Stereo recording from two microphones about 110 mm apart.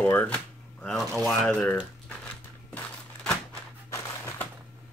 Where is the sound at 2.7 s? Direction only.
5° left (ahead or behind).